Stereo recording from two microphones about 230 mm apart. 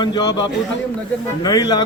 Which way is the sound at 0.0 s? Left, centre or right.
Centre.